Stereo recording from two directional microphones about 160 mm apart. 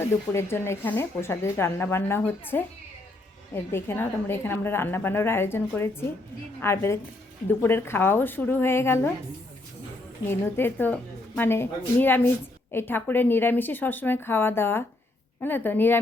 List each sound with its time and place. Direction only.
0.0 s speech: 15° left (ahead or behind)
10.2 s speech: 15° left (ahead or behind)